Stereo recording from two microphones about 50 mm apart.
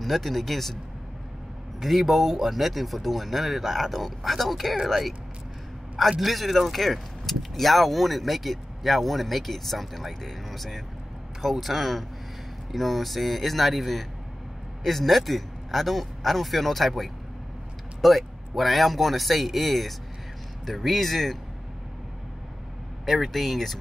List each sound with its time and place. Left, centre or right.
0.0 s speech: centre
1.8 s speech: centre
23.0 s speech: centre